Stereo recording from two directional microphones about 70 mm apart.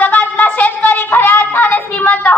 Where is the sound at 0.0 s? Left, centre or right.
Left.